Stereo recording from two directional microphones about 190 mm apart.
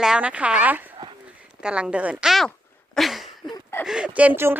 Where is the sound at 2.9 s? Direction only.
Centre (ahead or behind).